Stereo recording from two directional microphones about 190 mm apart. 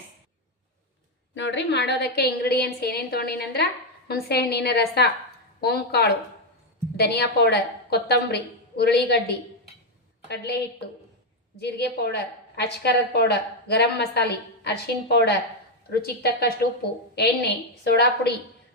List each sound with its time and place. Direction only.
1.4 s a woman's voice: 65° left (ahead or behind)